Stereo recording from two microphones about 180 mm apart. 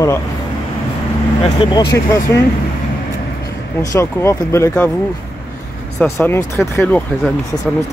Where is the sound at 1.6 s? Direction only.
25° left (ahead or behind).